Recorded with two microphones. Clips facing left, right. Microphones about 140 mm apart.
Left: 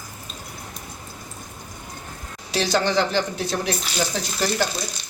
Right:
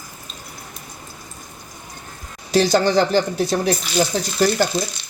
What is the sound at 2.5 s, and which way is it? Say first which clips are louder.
Speech: right 6 dB; 40° right (ahead or behind).